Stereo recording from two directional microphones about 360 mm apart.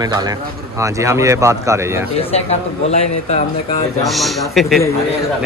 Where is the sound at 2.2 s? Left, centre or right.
Centre.